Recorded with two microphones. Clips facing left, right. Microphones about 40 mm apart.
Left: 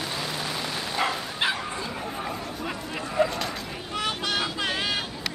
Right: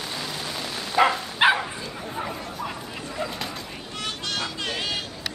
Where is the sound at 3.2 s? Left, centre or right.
Centre.